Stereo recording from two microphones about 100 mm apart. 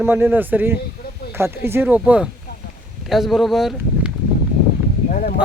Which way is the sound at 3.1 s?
5° right (ahead or behind).